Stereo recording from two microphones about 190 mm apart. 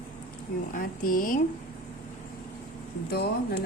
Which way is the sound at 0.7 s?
50° left (ahead or behind).